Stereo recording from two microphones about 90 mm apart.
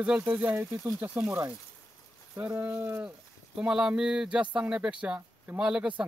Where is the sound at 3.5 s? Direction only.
10° right (ahead or behind).